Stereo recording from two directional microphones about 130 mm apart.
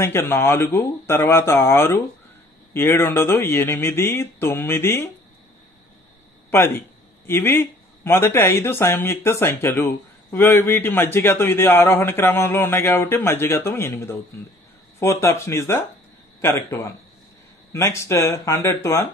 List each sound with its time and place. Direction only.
0.0 s speech: 20° left (ahead or behind)
6.5 s speech: 15° left (ahead or behind)